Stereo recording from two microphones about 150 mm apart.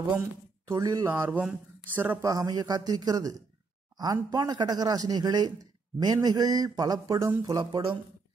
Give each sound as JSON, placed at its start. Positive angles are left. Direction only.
{"t": 0.7, "sound": "speech", "side_deg": -25}
{"t": 1.3, "sound": "speech", "side_deg": -10}